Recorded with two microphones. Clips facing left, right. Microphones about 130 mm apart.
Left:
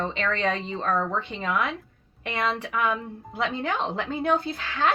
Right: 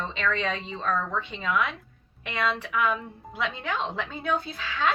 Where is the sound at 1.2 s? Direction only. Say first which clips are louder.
Even; 50° left (ahead or behind).